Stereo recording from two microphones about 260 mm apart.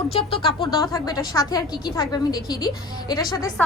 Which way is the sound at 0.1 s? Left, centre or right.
Left.